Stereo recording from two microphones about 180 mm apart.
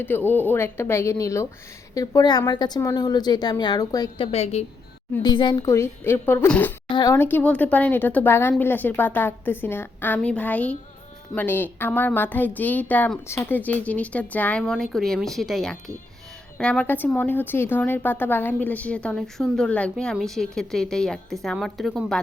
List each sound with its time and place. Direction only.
0.0 s a woman's voice: 10° left (ahead or behind)
4.3 s a woman's voice: 35° left (ahead or behind)
5.2 s a woman's voice: 25° left (ahead or behind)
6.8 s a woman's voice: 25° left (ahead or behind); by 22.2 s centre (ahead or behind)